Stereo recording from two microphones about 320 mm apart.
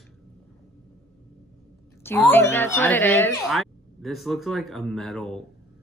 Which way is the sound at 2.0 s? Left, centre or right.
Centre.